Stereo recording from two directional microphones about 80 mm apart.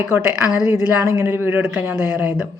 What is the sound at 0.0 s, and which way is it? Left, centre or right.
Speech, right.